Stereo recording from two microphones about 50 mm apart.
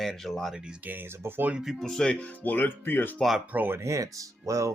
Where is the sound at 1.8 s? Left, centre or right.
Centre.